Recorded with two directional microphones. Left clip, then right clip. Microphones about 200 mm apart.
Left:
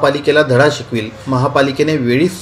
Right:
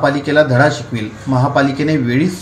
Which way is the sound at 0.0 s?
40° left (ahead or behind).